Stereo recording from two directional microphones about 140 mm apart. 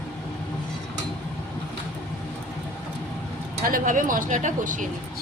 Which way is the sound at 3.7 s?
75° right (ahead or behind).